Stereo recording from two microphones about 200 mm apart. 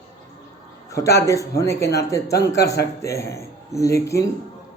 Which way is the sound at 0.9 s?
15° left (ahead or behind).